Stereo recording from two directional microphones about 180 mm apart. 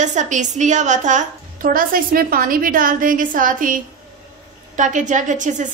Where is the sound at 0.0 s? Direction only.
45° right (ahead or behind).